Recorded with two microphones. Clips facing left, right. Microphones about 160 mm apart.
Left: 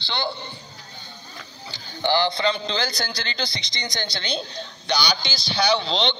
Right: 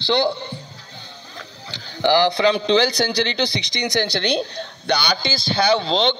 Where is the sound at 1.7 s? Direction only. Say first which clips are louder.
Right 5 dB; 75° right (ahead or behind).